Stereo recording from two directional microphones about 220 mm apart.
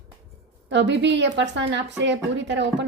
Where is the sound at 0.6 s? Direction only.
55° right (ahead or behind).